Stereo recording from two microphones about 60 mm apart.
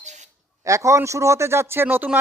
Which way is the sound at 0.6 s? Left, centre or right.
Right.